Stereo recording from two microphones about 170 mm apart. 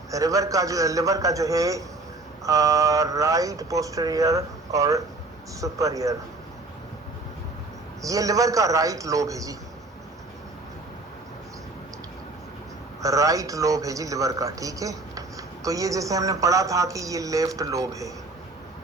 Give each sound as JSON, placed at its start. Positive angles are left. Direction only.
{"t": 0.1, "sound": "a man's voice", "side_deg": -20}
{"t": 8.0, "sound": "a man's voice", "side_deg": -20}
{"t": 13.0, "sound": "a man's voice", "side_deg": -20}